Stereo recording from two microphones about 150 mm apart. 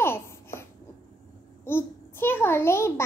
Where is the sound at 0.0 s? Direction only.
15° left (ahead or behind).